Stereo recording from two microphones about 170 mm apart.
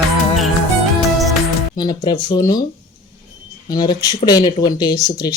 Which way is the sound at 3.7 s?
25° left (ahead or behind).